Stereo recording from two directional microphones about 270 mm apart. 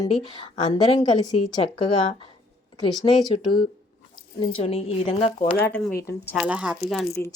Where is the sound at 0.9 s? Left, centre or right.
Centre.